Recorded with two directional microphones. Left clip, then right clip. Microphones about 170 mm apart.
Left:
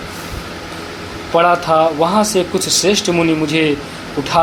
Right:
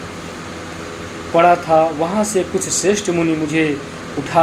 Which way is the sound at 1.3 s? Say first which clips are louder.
Even; 25° left (ahead or behind).